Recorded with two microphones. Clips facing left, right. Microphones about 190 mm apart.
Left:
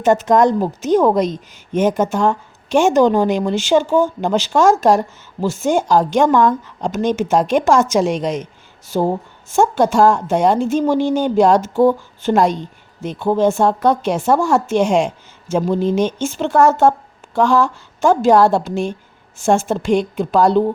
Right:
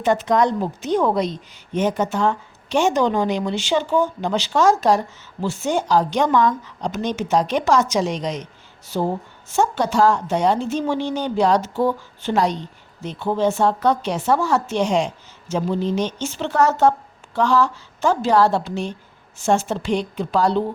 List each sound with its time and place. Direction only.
0.0 s a woman's voice: 45° left (ahead or behind)